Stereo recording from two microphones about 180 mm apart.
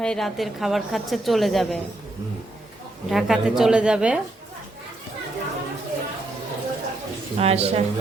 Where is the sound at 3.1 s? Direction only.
Centre (ahead or behind).